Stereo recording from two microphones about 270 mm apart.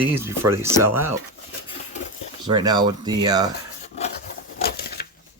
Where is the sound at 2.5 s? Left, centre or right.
Centre.